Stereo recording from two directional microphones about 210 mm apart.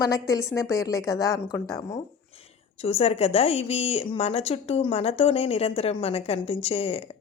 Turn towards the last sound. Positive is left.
turn(degrees=25)  # may be behind; listen again after turning